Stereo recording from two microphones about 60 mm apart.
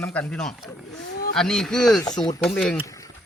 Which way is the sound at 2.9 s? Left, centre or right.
Left.